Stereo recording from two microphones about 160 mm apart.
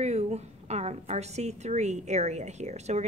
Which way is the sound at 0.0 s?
40° right (ahead or behind).